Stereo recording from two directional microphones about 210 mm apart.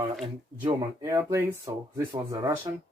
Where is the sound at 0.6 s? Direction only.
15° right (ahead or behind).